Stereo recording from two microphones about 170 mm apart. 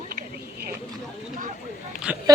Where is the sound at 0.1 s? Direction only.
60° right (ahead or behind).